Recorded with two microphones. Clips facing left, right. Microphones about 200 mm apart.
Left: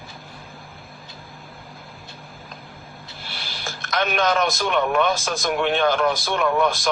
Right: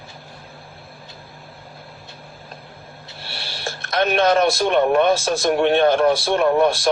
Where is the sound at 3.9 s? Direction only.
30° right (ahead or behind).